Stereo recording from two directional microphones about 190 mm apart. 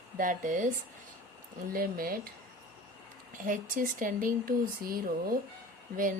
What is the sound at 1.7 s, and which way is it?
Speech, 50° right (ahead or behind).